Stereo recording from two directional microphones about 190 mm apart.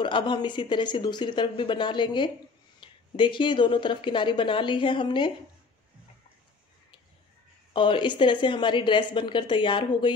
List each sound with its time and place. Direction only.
0.0 s speech: 25° left (ahead or behind)
7.7 s speech: 25° left (ahead or behind)